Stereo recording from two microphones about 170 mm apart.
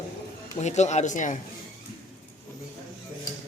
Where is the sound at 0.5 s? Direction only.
45° left (ahead or behind).